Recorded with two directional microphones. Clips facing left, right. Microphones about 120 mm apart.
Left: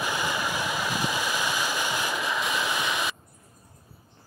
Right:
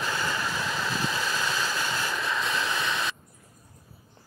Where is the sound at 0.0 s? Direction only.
15° left (ahead or behind).